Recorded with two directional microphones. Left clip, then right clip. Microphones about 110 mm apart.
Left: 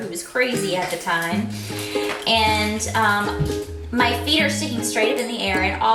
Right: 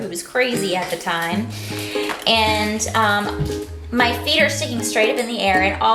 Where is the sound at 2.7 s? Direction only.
15° right (ahead or behind).